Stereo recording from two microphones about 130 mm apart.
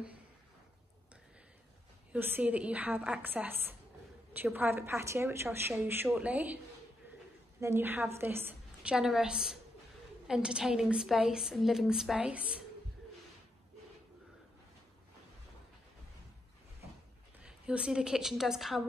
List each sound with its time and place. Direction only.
2.1 s a woman's voice: 15° right (ahead or behind)
7.6 s a woman's voice: 15° right (ahead or behind)
8.9 s a woman's voice: 5° right (ahead or behind)
17.4 s a woman's voice: 5° right (ahead or behind)